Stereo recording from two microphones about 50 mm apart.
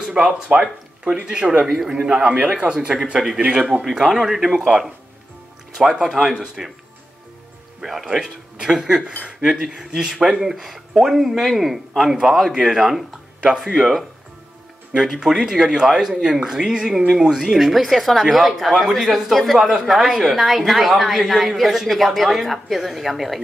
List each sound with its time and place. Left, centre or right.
0.2 s speech: right
1.2 s a man's voice: centre
3.3 s a man's voice: right
3.8 s a woman's voice: centre
7.8 s a man's voice: centre
15.0 s a woman's voice: centre
17.6 s a woman's voice: centre